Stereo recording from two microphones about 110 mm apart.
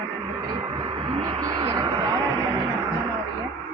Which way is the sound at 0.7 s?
45° right (ahead or behind).